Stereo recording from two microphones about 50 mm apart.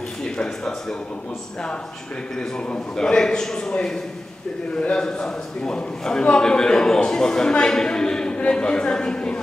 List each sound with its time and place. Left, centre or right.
0.4 s a man's voice: centre
2.7 s a man's voice: centre